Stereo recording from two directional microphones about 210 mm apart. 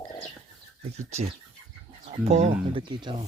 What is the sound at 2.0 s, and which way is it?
Speech, 30° right (ahead or behind).